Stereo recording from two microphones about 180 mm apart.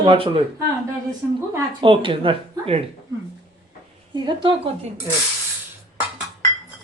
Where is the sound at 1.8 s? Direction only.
30° right (ahead or behind).